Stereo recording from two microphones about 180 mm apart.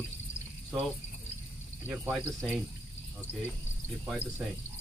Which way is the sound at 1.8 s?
10° right (ahead or behind).